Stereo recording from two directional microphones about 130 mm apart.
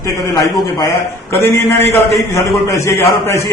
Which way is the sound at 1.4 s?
20° left (ahead or behind).